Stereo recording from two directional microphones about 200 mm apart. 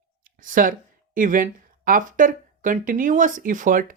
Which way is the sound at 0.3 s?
40° right (ahead or behind).